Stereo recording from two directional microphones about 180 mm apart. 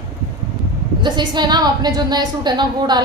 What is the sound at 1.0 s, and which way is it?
A woman's voice, 25° right (ahead or behind).